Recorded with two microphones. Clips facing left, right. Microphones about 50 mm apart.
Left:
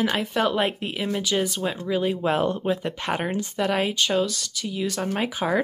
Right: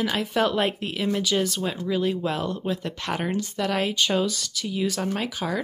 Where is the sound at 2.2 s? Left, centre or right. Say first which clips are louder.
Left 4 dB; left.